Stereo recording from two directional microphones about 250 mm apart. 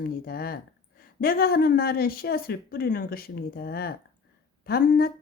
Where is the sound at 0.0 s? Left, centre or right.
Left.